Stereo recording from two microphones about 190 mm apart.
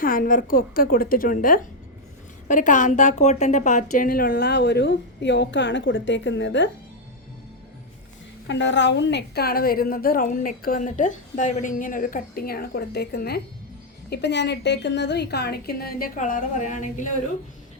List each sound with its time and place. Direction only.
0.0 s a woman's voice: 45° left (ahead or behind); by 6.7 s 75° left (ahead or behind)
8.4 s a woman's voice: 70° left (ahead or behind); by 17.1 s 40° left (ahead or behind)